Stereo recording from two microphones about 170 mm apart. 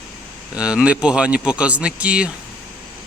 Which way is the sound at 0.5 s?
5° right (ahead or behind).